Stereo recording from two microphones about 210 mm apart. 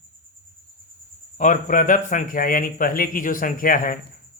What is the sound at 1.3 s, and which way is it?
Speech, 35° left (ahead or behind).